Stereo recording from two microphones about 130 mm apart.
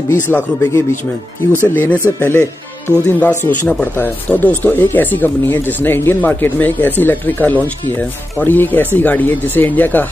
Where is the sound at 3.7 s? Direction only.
10° left (ahead or behind).